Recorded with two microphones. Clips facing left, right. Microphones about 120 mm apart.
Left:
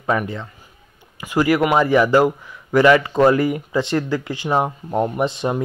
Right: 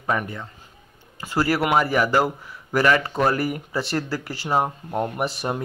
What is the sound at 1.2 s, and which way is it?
Speech, 15° left (ahead or behind).